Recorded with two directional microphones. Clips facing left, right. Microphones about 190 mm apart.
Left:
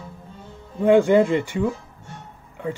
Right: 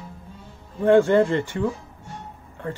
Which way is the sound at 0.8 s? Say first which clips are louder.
Left 1 dB; 15° left (ahead or behind).